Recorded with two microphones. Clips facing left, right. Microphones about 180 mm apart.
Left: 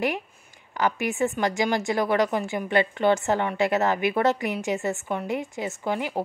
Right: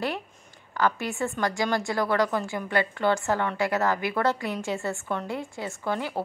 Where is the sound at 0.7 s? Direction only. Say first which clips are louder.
Left 2 dB; 20° left (ahead or behind).